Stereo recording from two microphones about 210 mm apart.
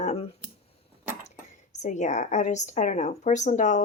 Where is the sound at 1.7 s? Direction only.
35° left (ahead or behind).